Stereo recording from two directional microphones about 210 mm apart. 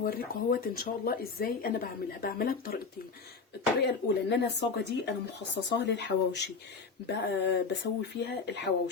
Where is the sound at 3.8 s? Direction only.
55° left (ahead or behind).